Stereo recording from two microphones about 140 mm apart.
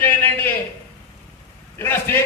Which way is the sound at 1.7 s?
15° left (ahead or behind).